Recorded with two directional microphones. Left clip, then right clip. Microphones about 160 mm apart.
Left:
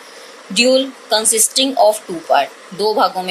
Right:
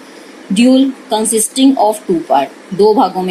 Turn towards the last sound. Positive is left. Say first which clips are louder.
# right 5 dB
turn(degrees=50)  # may be behind; listen again after turning